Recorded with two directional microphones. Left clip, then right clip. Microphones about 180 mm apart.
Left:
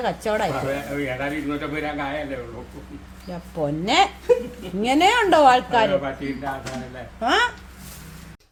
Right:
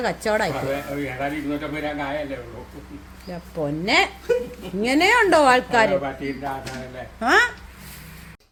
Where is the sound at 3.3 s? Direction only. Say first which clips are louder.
Left 1 dB; 5° right (ahead or behind).